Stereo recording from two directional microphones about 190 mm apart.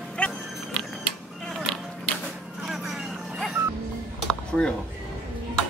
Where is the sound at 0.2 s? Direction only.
5° left (ahead or behind).